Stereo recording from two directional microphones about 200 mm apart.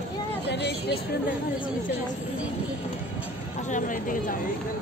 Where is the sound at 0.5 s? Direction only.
55° left (ahead or behind).